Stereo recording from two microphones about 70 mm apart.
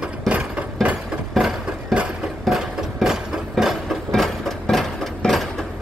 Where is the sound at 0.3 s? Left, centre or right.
Centre.